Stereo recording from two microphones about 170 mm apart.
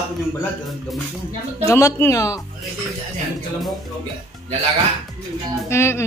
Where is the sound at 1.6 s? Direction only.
15° left (ahead or behind).